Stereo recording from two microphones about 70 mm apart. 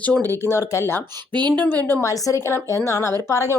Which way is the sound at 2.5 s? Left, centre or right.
Left.